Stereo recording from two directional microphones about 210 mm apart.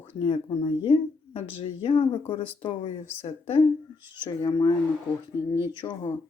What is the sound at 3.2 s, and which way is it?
Speech, 30° left (ahead or behind).